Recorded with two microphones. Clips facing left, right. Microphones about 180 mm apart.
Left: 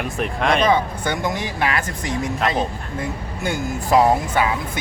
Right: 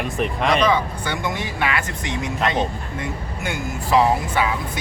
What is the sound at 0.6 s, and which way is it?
Speech, 45° left (ahead or behind).